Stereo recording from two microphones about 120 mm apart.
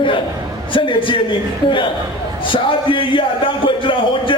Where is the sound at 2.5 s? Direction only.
45° left (ahead or behind).